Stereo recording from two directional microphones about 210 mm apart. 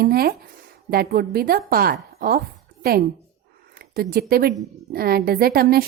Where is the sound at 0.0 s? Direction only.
45° right (ahead or behind).